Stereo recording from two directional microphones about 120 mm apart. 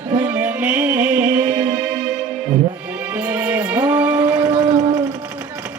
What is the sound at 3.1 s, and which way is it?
Music, 15° right (ahead or behind).